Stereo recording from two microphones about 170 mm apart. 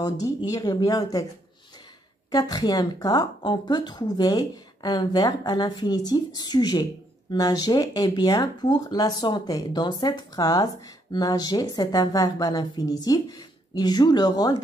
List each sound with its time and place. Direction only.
0.0 s a woman's voice: 20° left (ahead or behind)
2.3 s a woman's voice: 20° left (ahead or behind)